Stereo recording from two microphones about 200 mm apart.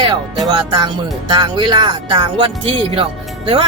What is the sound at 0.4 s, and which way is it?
Speech, 20° right (ahead or behind).